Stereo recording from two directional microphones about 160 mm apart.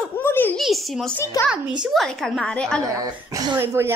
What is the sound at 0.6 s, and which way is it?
A woman's voice, centre (ahead or behind).